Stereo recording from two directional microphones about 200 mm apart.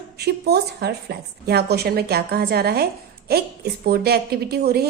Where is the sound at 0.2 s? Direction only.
55° right (ahead or behind).